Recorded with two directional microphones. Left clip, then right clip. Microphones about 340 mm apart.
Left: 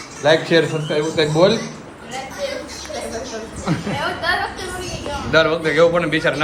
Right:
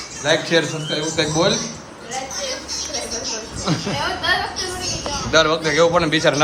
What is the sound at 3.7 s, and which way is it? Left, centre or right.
Speech, centre.